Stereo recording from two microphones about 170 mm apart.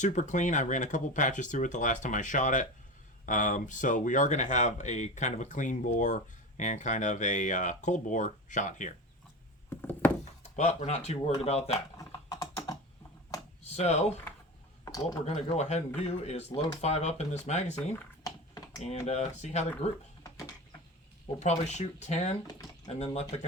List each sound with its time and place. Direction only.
0.0 s speech: 45° left (ahead or behind)
9.6 s a sound: 10° left (ahead or behind)
10.5 s speech: 45° left (ahead or behind)
11.9 s typing: 20° left (ahead or behind)
13.6 s speech: 40° left (ahead or behind)
15.2 s speech: 40° left (ahead or behind)
18.8 s speech: 40° left (ahead or behind)
21.3 s speech: 40° left (ahead or behind)